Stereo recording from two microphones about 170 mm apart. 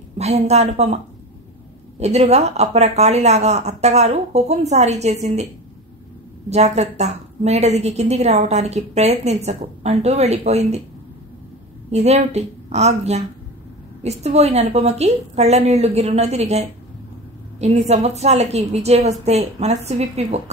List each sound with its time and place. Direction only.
0.2 s a woman's voice: 40° right (ahead or behind)
6.5 s a woman's voice: 40° right (ahead or behind)
11.9 s a woman's voice: 40° right (ahead or behind)